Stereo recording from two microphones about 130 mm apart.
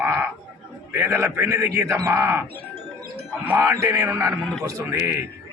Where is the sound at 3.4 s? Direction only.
20° right (ahead or behind).